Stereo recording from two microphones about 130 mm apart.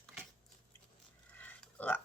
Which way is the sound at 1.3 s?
15° left (ahead or behind).